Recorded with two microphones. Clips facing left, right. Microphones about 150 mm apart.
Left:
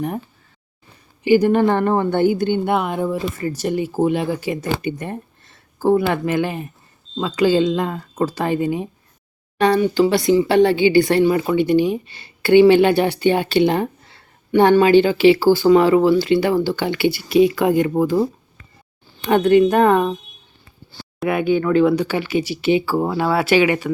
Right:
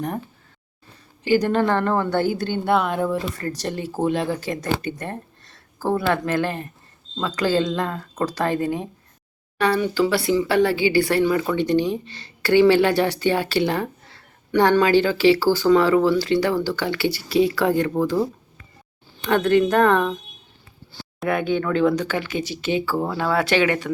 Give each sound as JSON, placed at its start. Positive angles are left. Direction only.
{"t": 1.2, "sound": "speech", "side_deg": 15}
{"t": 19.3, "sound": "speech", "side_deg": 15}
{"t": 21.2, "sound": "speech", "side_deg": 5}